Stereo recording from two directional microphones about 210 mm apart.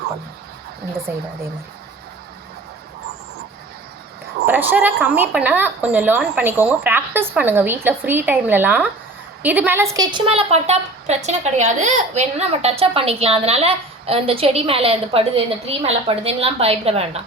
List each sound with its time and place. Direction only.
4.4 s a woman's voice: 10° right (ahead or behind); by 17.1 s 30° right (ahead or behind)